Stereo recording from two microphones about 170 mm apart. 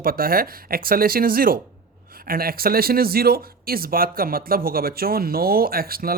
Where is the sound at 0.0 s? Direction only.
60° right (ahead or behind).